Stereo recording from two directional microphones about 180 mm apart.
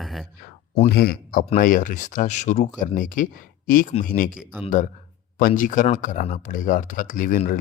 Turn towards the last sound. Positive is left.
turn(degrees=50)  # may be behind; listen again after turning